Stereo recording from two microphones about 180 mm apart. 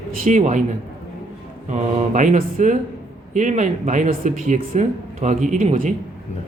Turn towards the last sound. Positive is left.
turn(degrees=-45)  # may be behind; listen again after turning